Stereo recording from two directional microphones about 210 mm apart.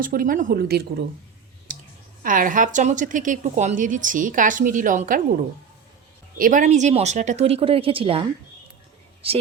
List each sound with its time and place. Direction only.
0.0 s a woman's voice: 40° right (ahead or behind)
1.7 s clicking: 40° right (ahead or behind)
2.2 s a woman's voice: 40° right (ahead or behind)